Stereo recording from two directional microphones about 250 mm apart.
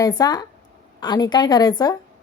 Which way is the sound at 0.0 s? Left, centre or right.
Centre.